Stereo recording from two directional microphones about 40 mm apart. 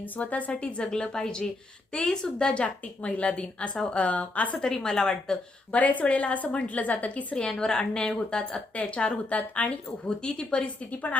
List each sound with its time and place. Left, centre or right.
0.0 s a woman's voice: left
0.9 s a woman's voice: left
2.2 s a woman's voice: left
4.6 s speech: centre
5.7 s a woman's voice: left
7.3 s a woman's voice: centre
8.7 s a woman's voice: left
9.6 s a woman's voice: left
10.2 s a woman's voice: left